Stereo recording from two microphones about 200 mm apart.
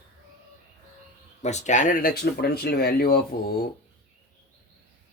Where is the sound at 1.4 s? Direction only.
35° left (ahead or behind); by 3.5 s 50° left (ahead or behind).